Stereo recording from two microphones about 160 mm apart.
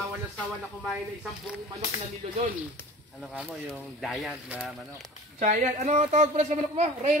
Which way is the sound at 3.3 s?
5° right (ahead or behind).